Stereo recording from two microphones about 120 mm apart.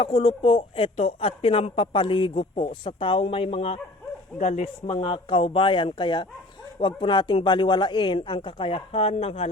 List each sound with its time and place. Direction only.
0.0 s speech: 45° left (ahead or behind)
4.4 s speech: 70° left (ahead or behind)